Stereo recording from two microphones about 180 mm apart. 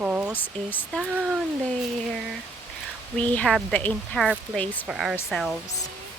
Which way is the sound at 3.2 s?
5° left (ahead or behind).